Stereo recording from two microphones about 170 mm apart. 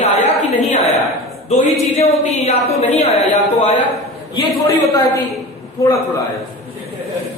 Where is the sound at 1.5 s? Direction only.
40° left (ahead or behind).